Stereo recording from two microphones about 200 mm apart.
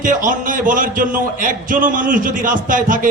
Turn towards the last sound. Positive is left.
turn(degrees=-40)  # may be behind; listen again after turning